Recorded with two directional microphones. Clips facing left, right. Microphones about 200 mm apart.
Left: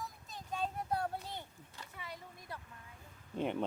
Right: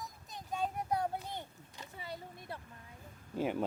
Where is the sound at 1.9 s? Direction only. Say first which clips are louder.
Right 4 dB; 30° right (ahead or behind).